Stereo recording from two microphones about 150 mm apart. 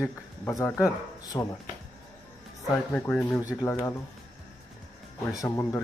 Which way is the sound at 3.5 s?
20° left (ahead or behind).